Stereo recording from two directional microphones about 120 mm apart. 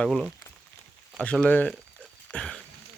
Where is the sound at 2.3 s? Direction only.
5° left (ahead or behind).